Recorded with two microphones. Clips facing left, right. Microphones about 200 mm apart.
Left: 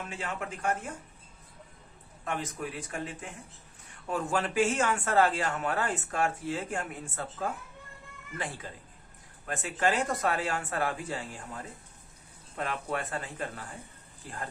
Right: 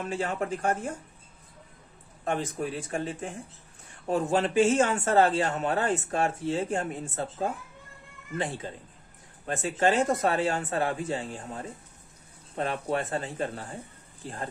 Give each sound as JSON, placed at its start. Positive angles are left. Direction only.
{"t": 0.1, "sound": "speech", "side_deg": -35}
{"t": 2.2, "sound": "speech", "side_deg": -30}